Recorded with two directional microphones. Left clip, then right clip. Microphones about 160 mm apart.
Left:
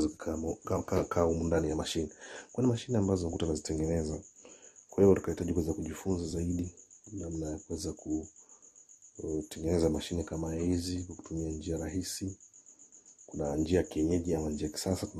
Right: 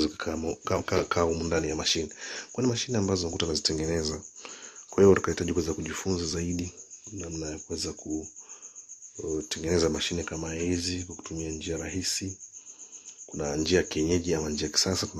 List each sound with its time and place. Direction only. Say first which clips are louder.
0.0 s speech: right 4 dB; 10° left (ahead or behind)
1.5 s speech: right 4 dB; 30° left (ahead or behind)
7.3 s speech: right 4 dB; 25° left (ahead or behind)
9.5 s speech: right 4 dB; 15° left (ahead or behind)
13.3 s speech: right 4 dB; 15° left (ahead or behind)